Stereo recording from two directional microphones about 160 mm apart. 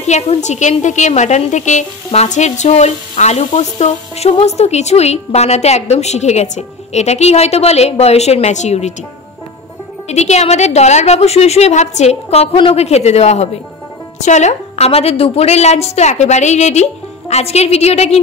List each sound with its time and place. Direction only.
0.0 s frying: 45° left (ahead or behind)
10.0 s frying: 45° left (ahead or behind)
17.3 s a woman's voice: 40° left (ahead or behind)